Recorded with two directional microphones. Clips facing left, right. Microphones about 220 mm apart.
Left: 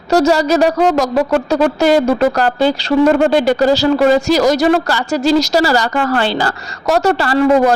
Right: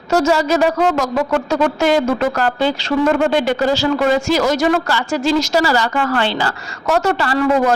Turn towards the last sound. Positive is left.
turn(degrees=35)  # may be behind; listen again after turning